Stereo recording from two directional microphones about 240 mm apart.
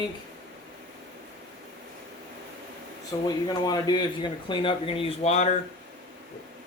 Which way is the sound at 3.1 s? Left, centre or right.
Centre.